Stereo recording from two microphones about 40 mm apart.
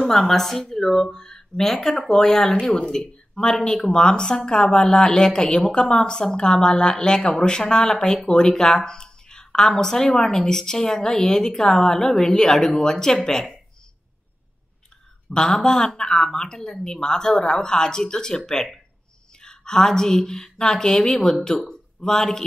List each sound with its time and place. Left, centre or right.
0.0 s a woman's voice: centre
15.2 s a woman's voice: centre